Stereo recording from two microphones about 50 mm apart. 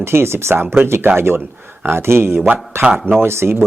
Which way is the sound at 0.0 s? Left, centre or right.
Right.